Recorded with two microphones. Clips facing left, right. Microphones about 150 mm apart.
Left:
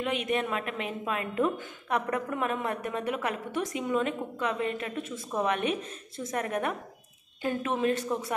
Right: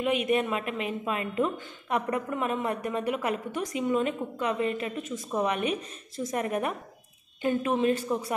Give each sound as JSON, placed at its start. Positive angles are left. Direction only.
{"t": 0.0, "sound": "a woman's voice", "side_deg": -5}